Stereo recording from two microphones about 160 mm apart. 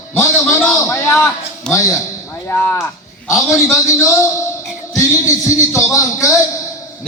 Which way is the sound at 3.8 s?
20° left (ahead or behind).